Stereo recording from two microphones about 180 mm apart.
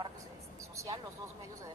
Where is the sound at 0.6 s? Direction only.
15° right (ahead or behind).